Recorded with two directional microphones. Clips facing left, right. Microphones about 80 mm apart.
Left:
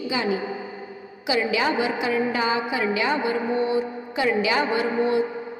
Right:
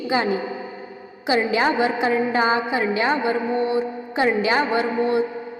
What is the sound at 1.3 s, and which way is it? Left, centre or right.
A woman's voice, right.